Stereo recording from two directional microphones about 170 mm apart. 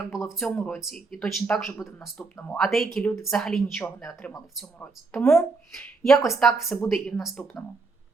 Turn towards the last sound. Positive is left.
turn(degrees=5)  # may be behind; listen again after turning